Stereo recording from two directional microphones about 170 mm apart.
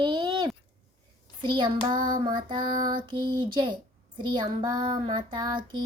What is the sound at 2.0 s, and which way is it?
Child singing, 55° right (ahead or behind).